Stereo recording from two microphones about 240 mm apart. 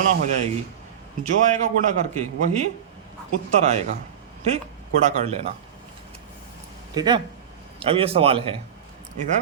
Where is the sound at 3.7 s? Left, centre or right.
Right.